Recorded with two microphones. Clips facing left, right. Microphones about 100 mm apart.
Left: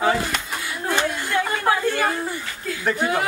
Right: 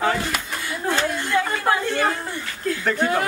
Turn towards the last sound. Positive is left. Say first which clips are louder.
# right 1 dB
turn(degrees=5)  # may be behind; listen again after turning